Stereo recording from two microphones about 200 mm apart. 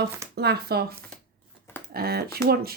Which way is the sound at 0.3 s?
55° right (ahead or behind).